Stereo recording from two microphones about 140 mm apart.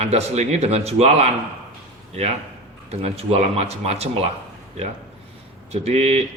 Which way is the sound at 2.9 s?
50° right (ahead or behind).